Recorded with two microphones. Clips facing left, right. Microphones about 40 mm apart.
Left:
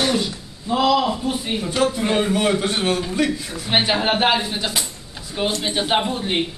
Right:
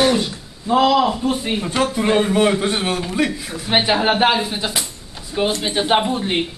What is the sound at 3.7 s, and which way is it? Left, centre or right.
Speech, centre.